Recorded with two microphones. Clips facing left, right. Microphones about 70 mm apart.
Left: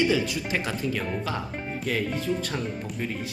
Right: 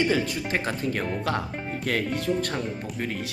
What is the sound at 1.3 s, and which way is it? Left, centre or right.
Speech, right.